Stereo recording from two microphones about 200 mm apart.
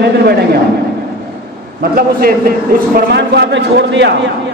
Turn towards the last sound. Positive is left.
turn(degrees=-60)  # may be behind; listen again after turning